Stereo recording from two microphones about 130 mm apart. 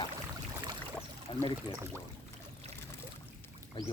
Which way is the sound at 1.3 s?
35° left (ahead or behind).